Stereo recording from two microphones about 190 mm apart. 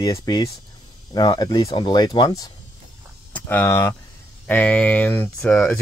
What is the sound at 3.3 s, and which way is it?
Speech, 10° left (ahead or behind).